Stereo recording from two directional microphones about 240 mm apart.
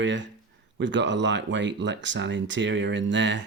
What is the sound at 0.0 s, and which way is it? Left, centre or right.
Speech, right.